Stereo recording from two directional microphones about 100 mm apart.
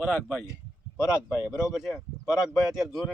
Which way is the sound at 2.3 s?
5° right (ahead or behind).